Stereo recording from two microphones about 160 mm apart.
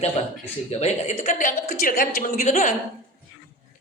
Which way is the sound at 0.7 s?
45° left (ahead or behind).